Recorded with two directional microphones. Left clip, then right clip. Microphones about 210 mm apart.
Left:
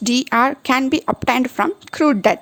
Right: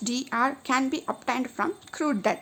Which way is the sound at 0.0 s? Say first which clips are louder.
Left 10 dB; 40° left (ahead or behind).